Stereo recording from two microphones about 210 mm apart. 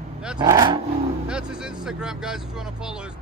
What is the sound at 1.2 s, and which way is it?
Vehicle, 5° right (ahead or behind).